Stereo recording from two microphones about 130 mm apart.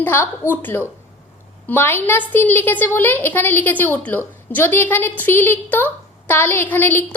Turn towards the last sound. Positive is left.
turn(degrees=15)  # may be behind; listen again after turning